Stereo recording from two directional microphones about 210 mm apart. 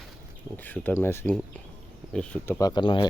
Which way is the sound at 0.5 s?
10° left (ahead or behind).